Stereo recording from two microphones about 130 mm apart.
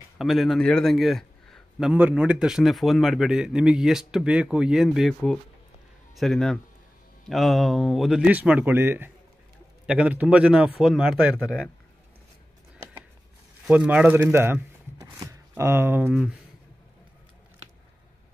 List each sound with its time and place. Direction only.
0.2 s a man's voice: centre (ahead or behind)
13.7 s speech: 10° right (ahead or behind)
15.1 s a sound: 20° right (ahead or behind)